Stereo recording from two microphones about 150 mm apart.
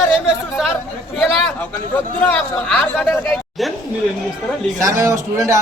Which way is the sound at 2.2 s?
10° left (ahead or behind).